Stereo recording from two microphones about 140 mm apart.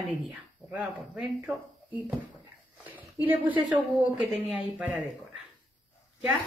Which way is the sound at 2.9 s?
10° right (ahead or behind).